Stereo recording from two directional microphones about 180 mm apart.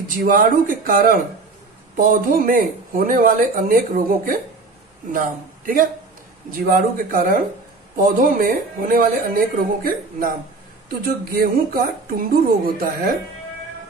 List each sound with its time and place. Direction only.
0.2 s a man's voice: 50° right (ahead or behind)
11.7 s speech: 55° right (ahead or behind)